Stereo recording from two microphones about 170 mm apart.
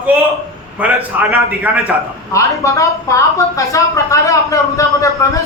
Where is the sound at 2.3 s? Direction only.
20° left (ahead or behind).